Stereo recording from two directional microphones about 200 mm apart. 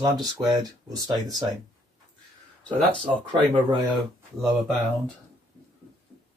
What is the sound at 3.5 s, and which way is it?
Speech, 25° right (ahead or behind).